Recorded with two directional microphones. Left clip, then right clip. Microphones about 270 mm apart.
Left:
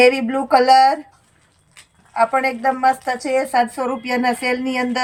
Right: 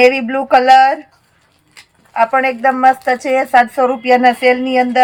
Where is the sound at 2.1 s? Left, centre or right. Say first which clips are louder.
Right 4 dB; centre.